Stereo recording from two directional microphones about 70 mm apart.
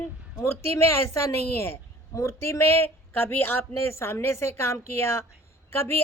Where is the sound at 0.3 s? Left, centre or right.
Left.